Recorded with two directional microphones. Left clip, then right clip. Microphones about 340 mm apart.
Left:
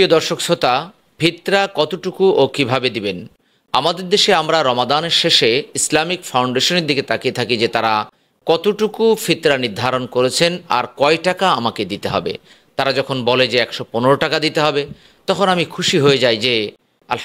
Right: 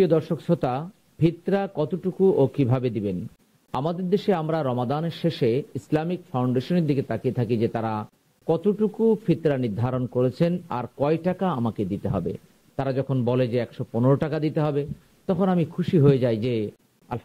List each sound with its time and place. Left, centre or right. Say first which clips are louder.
0.0 s a man's voice: left 8 dB; centre
2.1 s speech: left 7 dB; left
2.5 s a man's voice: left 9 dB; centre
8.9 s speech: left 8 dB; left
9.3 s a man's voice: left 8 dB; centre